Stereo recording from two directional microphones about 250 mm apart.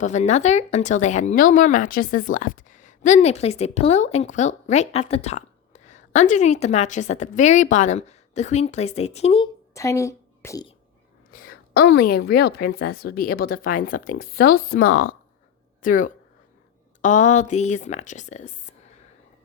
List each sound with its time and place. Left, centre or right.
0.0 s speech: left
11.3 s a woman's voice: left